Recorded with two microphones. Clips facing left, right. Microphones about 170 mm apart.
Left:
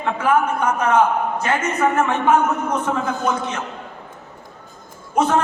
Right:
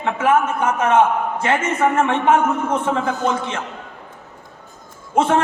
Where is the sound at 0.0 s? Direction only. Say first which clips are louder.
Right 1 dB; 25° right (ahead or behind).